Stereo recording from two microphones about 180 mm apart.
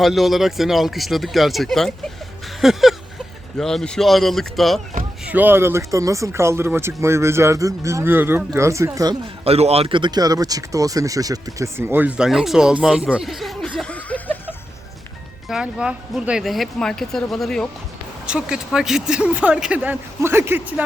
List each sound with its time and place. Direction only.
0.0 s speech: centre (ahead or behind)
5.2 s speech: 10° right (ahead or behind)
9.4 s speech: 35° right (ahead or behind); by 13.0 s 5° right (ahead or behind)
13.1 s chuckle: 5° right (ahead or behind)
15.4 s speech: 5° right (ahead or behind)